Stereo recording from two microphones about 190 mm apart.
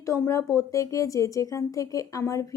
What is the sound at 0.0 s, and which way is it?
A woman's voice, 15° left (ahead or behind).